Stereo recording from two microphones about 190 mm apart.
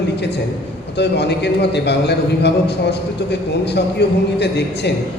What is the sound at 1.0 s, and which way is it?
A man's voice, 60° left (ahead or behind).